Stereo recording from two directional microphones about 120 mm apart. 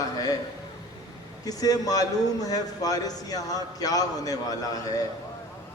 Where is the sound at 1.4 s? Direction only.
30° left (ahead or behind).